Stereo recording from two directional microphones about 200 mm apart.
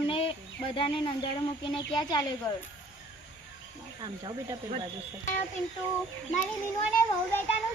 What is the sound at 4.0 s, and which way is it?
Speech, 25° right (ahead or behind).